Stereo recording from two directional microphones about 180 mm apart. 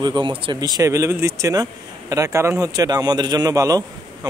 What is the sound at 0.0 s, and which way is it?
Speech, 25° right (ahead or behind).